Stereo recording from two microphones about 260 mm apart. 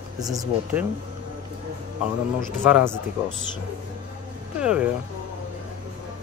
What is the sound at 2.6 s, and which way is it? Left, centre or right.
Speech, centre.